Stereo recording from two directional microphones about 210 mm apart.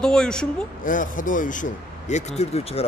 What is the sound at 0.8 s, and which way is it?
Speech, 40° left (ahead or behind).